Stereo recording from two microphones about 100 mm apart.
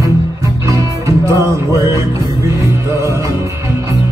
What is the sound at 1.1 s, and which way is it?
Music, 30° right (ahead or behind).